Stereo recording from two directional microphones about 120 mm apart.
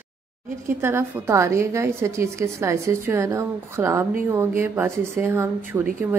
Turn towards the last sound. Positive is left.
turn(degrees=-20)  # may be behind; listen again after turning